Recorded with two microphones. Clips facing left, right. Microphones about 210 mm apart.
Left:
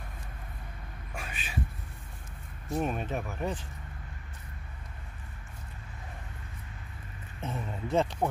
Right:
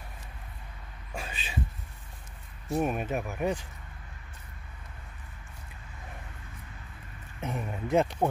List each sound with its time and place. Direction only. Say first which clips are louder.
1.1 s a sound: right 3 dB; 25° right (ahead or behind)
2.7 s speech: right 3 dB; 10° right (ahead or behind)
7.4 s speech: right 2 dB; 15° right (ahead or behind)